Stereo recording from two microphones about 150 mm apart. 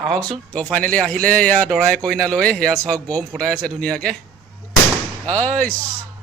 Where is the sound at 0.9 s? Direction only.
5° left (ahead or behind).